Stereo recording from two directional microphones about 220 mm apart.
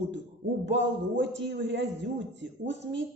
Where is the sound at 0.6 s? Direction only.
55° right (ahead or behind).